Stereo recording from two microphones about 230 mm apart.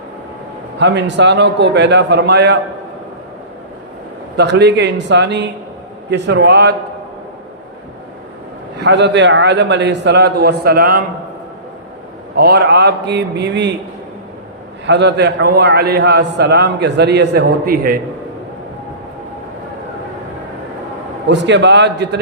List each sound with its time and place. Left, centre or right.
0.8 s a man's voice: right
4.4 s a man's voice: right
8.8 s a man's voice: right
12.4 s a man's voice: right
14.8 s a man's voice: right
21.2 s a man's voice: right